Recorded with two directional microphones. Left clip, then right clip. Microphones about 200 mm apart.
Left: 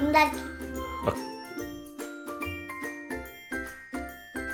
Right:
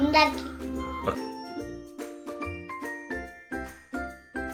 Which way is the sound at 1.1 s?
35° left (ahead or behind).